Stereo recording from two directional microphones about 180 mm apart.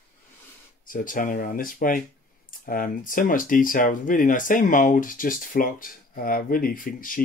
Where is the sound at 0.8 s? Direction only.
50° left (ahead or behind).